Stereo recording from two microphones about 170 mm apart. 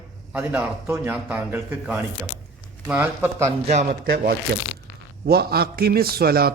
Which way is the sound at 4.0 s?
65° right (ahead or behind).